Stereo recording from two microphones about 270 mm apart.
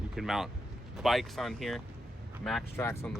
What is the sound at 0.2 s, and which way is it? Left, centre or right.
Speech, centre.